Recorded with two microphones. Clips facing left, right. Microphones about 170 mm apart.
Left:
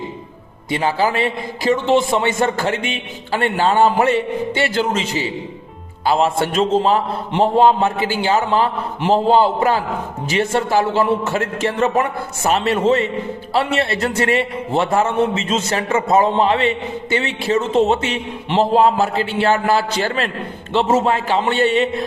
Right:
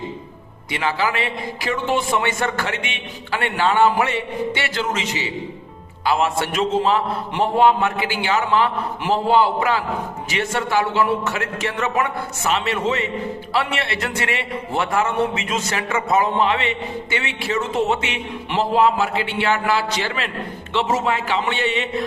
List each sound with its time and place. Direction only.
0.7 s a man's voice: 35° left (ahead or behind)